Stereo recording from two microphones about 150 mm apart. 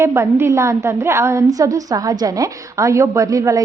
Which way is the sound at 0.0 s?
15° right (ahead or behind).